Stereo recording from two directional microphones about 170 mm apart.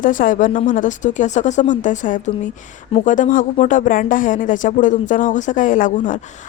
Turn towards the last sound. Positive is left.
turn(degrees=50)  # may be behind; listen again after turning